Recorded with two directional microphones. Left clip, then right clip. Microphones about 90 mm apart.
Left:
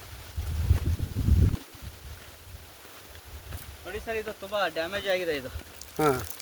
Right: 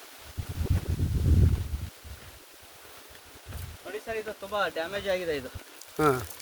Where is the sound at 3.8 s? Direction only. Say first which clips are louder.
Left 1 dB; 40° right (ahead or behind); by 5.5 s 20° right (ahead or behind).